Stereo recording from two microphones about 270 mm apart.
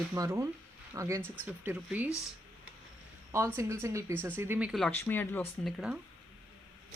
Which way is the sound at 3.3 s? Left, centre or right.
Centre.